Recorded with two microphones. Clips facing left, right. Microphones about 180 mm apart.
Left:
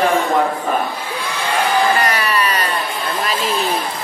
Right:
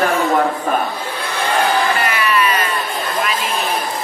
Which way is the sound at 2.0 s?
40° left (ahead or behind).